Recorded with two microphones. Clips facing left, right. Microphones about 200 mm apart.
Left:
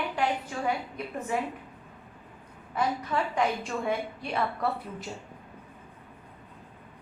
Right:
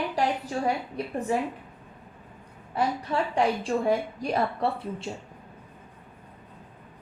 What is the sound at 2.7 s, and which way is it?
A woman's voice, 30° right (ahead or behind).